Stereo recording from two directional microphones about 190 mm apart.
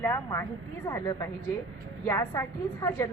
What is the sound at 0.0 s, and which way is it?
A woman's voice, 15° left (ahead or behind).